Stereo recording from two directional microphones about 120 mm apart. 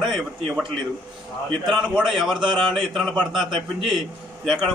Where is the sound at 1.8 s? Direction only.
5° right (ahead or behind).